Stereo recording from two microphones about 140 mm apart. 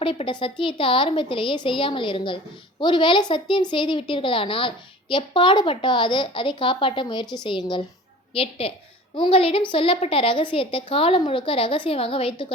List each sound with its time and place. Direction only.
0.0 s a woman's voice: 40° left (ahead or behind)